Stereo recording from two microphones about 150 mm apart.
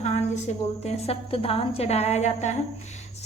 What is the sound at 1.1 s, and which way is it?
A woman's voice, 40° left (ahead or behind).